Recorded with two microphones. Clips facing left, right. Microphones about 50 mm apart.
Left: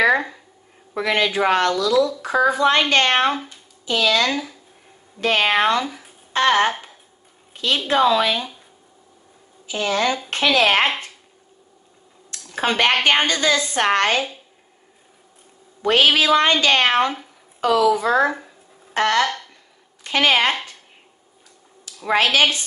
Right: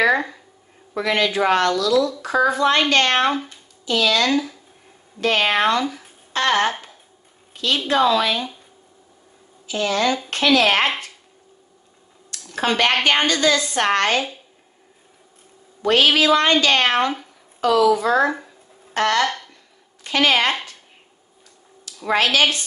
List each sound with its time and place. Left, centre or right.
0.9 s speech: left
3.3 s speech: centre
3.8 s speech: left
5.9 s a sound: centre
6.3 s a woman's voice: centre
9.7 s speech: left
12.5 s speech: left
15.8 s speech: left
19.2 s speech: centre
20.1 s speech: left
21.8 s speech: left